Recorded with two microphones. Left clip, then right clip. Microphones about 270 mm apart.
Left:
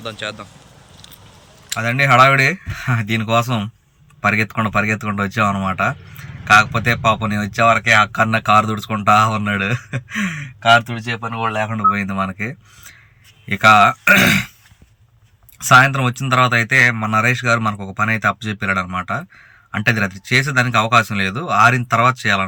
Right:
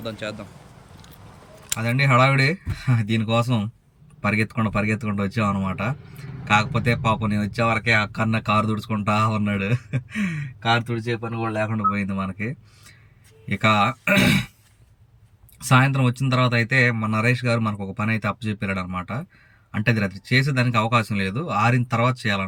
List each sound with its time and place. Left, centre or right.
0.0 s speech: centre
1.8 s speech: centre
11.9 s speech: centre
15.7 s speech: centre